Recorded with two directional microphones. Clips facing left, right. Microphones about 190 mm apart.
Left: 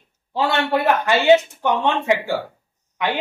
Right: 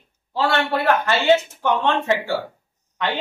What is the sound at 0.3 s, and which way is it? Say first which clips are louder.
Speech: left 1 dB; 15° left (ahead or behind).